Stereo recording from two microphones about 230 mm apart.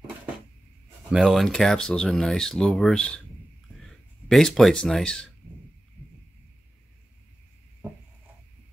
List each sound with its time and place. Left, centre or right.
1.1 s speech: centre